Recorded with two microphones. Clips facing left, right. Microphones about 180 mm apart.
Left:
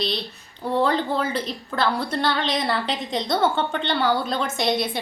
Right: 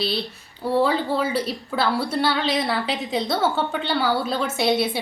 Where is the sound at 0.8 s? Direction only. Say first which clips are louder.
Right 1 dB; 5° right (ahead or behind).